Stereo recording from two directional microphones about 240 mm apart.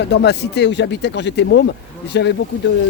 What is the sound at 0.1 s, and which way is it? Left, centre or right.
Speech, left.